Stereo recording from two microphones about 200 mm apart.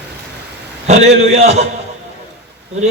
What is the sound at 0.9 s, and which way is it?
Speech, 35° right (ahead or behind).